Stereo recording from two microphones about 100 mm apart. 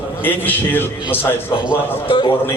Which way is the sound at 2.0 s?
60° left (ahead or behind).